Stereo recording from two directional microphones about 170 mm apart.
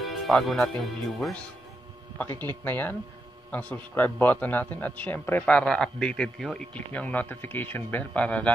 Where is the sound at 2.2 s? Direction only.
10° left (ahead or behind).